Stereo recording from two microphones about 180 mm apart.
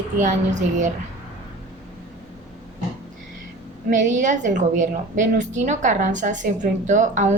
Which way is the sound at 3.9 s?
45° right (ahead or behind).